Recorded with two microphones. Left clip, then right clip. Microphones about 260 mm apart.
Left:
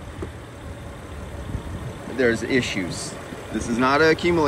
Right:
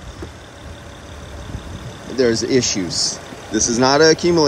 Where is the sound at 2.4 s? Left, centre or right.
Centre.